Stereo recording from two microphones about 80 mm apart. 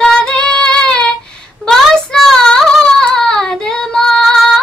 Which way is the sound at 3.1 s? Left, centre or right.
Centre.